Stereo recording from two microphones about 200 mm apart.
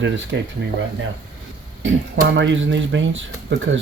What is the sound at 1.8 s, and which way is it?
Speech, 65° right (ahead or behind).